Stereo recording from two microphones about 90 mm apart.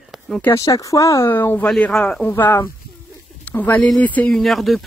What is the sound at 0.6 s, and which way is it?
Speech, 40° left (ahead or behind).